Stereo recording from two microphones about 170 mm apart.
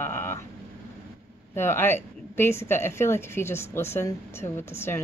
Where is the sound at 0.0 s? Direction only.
15° left (ahead or behind).